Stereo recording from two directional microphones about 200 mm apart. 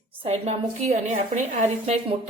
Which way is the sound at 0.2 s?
35° right (ahead or behind).